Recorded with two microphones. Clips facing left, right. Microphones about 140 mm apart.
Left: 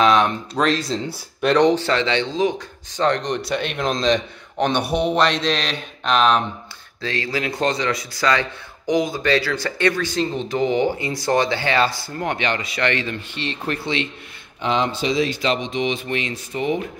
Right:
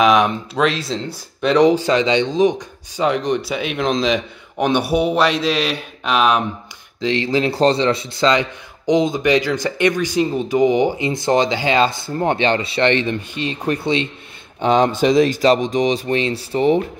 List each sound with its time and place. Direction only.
0.0 s a man's voice: 10° right (ahead or behind)
3.0 s a man's voice: 5° right (ahead or behind)
7.0 s a man's voice: 20° right (ahead or behind)
14.6 s speech: 45° right (ahead or behind)